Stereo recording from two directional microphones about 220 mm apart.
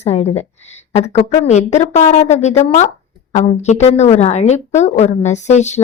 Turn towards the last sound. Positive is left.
turn(degrees=30)  # may be behind; listen again after turning